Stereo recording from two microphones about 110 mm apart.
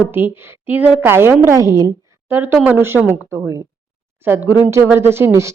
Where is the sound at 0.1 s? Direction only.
20° right (ahead or behind).